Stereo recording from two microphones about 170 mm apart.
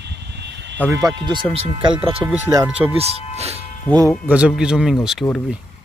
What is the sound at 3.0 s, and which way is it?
Speech, 35° right (ahead or behind).